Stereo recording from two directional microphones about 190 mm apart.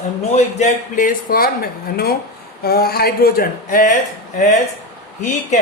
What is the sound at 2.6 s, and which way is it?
A man's voice, 55° left (ahead or behind).